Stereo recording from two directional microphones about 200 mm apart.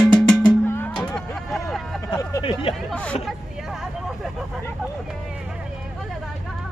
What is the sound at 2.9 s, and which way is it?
Hubbub, 5° left (ahead or behind).